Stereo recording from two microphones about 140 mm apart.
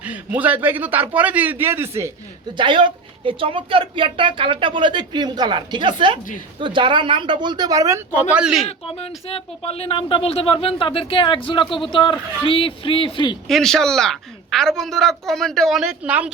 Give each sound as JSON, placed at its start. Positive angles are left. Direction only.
{"t": 0.0, "sound": "a man's voice", "side_deg": -10}
{"t": 2.6, "sound": "speech", "side_deg": -35}
{"t": 8.6, "sound": "speech", "side_deg": 45}
{"t": 13.5, "sound": "a woman's voice", "side_deg": 5}